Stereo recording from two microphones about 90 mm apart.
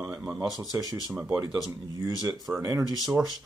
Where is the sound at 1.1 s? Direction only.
20° right (ahead or behind).